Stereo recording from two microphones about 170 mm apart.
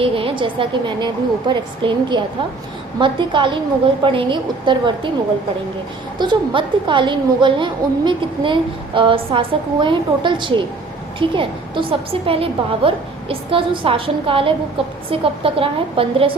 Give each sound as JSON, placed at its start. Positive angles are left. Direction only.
{"t": 0.0, "sound": "a woman's voice", "side_deg": -30}
{"t": 6.1, "sound": "a woman's voice", "side_deg": -30}